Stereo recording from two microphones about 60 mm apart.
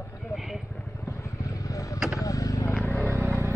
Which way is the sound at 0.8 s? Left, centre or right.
Left.